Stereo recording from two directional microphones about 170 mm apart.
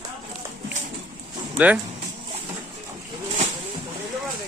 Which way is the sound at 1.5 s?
10° right (ahead or behind).